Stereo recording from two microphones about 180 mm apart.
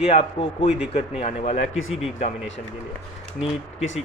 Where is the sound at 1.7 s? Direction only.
90° left.